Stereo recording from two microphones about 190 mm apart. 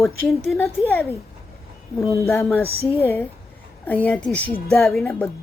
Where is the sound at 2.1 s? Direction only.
15° left (ahead or behind).